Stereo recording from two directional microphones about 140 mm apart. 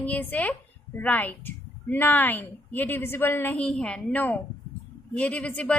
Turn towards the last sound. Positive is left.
turn(degrees=10)  # may be behind; listen again after turning